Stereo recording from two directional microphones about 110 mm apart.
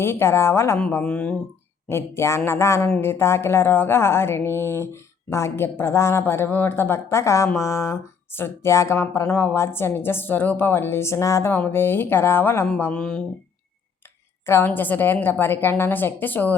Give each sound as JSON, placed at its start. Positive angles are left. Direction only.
{"t": 0.0, "sound": "speech", "side_deg": 20}
{"t": 1.0, "sound": "speech", "side_deg": 10}
{"t": 1.9, "sound": "speech", "side_deg": 25}
{"t": 12.9, "sound": "speech", "side_deg": 10}
{"t": 14.4, "sound": "speech", "side_deg": 20}